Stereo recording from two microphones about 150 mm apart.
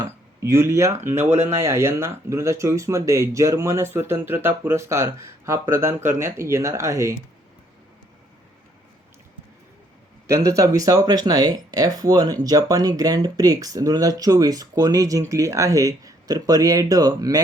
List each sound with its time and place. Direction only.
0.0 s speech: 20° right (ahead or behind)
10.2 s speech: 20° right (ahead or behind)